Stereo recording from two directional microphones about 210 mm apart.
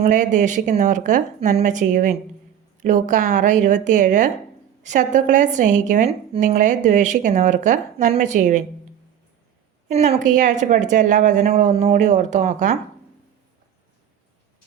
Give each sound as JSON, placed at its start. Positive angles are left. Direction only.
{"t": 0.0, "sound": "a woman's voice", "side_deg": -35}
{"t": 9.9, "sound": "a woman's voice", "side_deg": -30}